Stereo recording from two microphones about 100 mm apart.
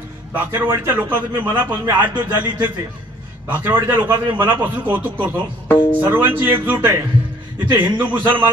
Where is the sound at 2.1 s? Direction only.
45° right (ahead or behind).